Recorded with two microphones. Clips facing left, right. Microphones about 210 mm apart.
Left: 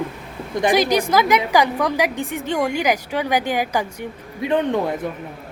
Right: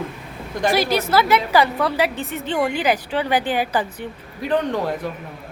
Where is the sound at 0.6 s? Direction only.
15° left (ahead or behind).